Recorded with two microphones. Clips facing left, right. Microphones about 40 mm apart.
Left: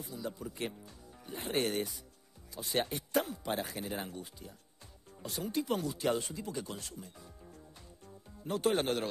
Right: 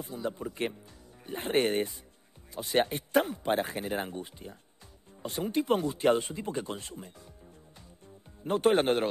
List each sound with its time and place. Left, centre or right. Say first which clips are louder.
0.0 s speech: right 6 dB; right
8.5 s speech: right 6 dB; right